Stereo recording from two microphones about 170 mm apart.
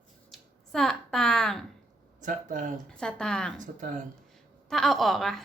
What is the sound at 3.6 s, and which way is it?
Speech, 50° right (ahead or behind).